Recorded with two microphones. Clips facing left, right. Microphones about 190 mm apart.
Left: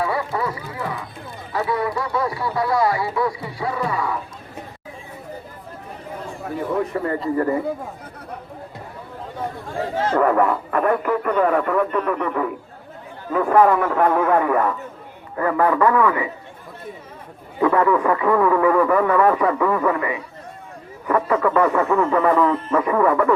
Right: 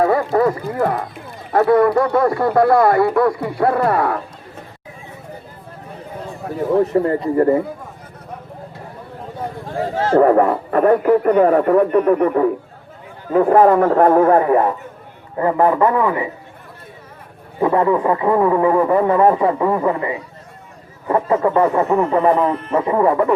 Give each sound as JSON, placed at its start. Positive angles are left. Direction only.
{"t": 0.0, "sound": "a sound", "side_deg": -45}
{"t": 1.5, "sound": "a man's voice", "side_deg": -55}
{"t": 6.9, "sound": "speech", "side_deg": -30}
{"t": 10.1, "sound": "a man's voice", "side_deg": -35}
{"t": 17.6, "sound": "a man's voice", "side_deg": -30}